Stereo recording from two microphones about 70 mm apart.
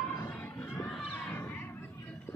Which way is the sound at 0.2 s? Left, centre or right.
Left.